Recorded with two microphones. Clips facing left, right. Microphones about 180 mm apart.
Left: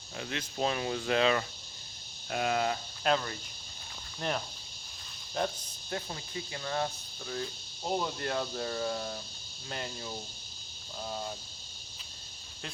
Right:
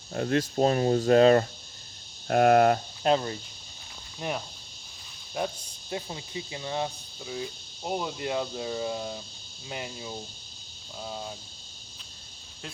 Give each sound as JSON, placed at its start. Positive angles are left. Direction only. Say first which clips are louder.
{"t": 0.1, "sound": "speech", "louder": "right 12 dB", "side_deg": -50}
{"t": 2.2, "sound": "speech", "louder": "right 11 dB", "side_deg": -55}
{"t": 3.0, "sound": "speech", "louder": "right 3 dB", "side_deg": -30}
{"t": 4.2, "sound": "speech", "louder": "right 1 dB", "side_deg": -10}